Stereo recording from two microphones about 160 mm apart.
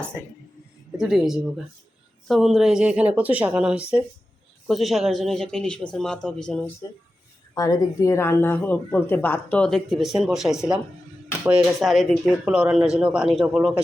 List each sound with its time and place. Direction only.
0.9 s speech: centre (ahead or behind)
6.8 s speech: 25° left (ahead or behind); by 13.8 s 5° right (ahead or behind)